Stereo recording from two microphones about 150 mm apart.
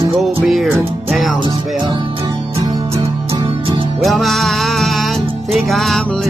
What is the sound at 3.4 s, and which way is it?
Music, 35° right (ahead or behind).